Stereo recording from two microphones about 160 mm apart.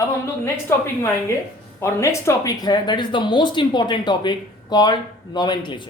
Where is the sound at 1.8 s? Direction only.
15° left (ahead or behind).